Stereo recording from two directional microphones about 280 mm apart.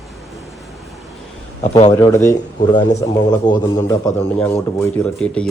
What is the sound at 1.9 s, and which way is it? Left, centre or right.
A man's voice, centre.